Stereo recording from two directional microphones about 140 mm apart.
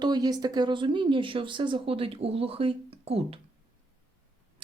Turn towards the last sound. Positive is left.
turn(degrees=-45)  # may be behind; listen again after turning